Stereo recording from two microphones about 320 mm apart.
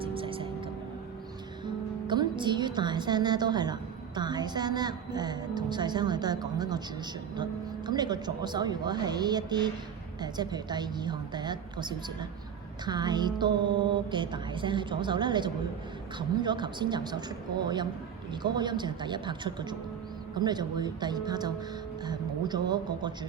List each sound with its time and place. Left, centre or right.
0.0 s music: centre
1.6 s speech: centre
7.9 s speech: centre